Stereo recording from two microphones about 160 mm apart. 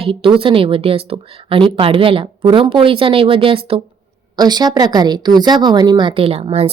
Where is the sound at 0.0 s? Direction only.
35° right (ahead or behind).